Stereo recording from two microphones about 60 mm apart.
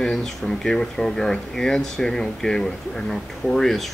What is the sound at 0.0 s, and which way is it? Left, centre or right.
Speech, centre.